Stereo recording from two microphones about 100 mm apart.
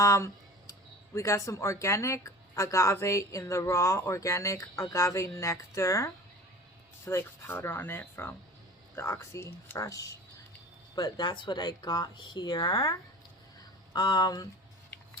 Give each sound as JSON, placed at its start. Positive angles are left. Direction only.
{"t": 0.0, "sound": "speech", "side_deg": 30}